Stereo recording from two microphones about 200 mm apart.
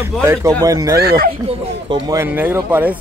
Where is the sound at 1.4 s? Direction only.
20° right (ahead or behind).